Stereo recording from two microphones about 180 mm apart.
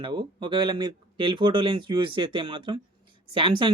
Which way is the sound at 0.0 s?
25° right (ahead or behind).